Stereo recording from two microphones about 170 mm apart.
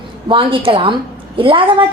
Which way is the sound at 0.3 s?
30° right (ahead or behind).